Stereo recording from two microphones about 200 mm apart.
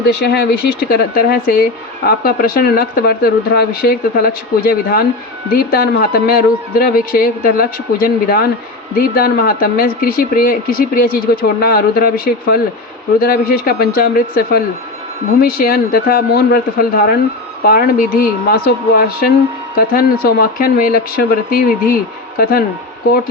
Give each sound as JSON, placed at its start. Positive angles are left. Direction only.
{"t": 0.0, "sound": "speech", "side_deg": 55}